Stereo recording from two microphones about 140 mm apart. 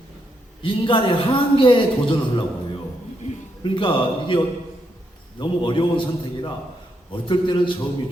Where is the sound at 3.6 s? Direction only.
35° left (ahead or behind).